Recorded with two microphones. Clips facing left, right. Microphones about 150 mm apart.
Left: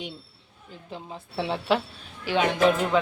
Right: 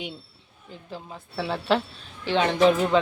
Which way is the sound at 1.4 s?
20° left (ahead or behind).